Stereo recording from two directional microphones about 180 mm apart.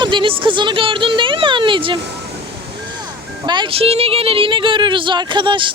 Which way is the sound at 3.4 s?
25° right (ahead or behind).